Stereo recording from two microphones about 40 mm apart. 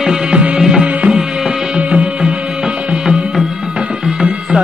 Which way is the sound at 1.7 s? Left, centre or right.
Right.